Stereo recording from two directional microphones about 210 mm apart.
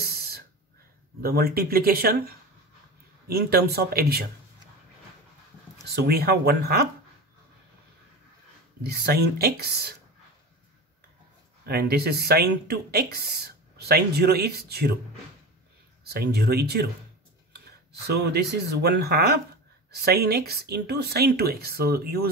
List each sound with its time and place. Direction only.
0.0 s throat clearing: 45° right (ahead or behind)
1.2 s speech: 45° right (ahead or behind)
6.0 s speech: 50° right (ahead or behind)
8.8 s speech: 50° right (ahead or behind)
11.6 s speech: 50° right (ahead or behind)
16.0 s speech: 50° right (ahead or behind)